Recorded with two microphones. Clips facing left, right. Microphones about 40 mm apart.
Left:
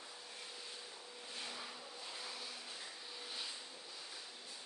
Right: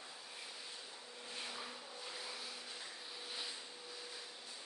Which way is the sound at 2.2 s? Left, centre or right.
Centre.